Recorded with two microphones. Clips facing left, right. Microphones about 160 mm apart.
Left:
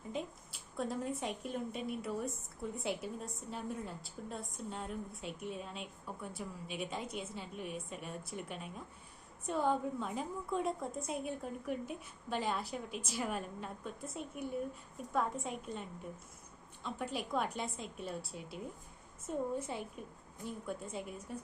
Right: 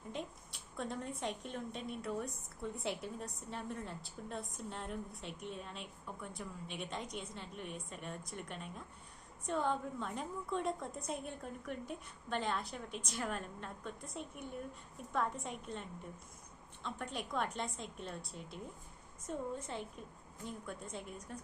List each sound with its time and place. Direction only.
0.1 s a woman's voice: centre (ahead or behind)
16.8 s a woman's voice: 5° left (ahead or behind)
19.5 s a woman's voice: 10° left (ahead or behind)